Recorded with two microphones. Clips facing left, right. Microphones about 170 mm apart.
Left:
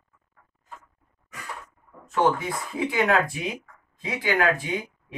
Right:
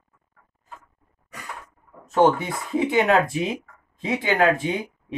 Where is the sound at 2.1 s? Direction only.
25° right (ahead or behind).